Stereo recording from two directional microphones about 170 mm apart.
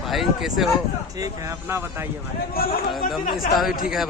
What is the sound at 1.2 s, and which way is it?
Speech, 15° right (ahead or behind).